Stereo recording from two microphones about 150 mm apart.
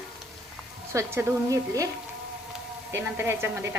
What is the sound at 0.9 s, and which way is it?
Speech, 20° right (ahead or behind).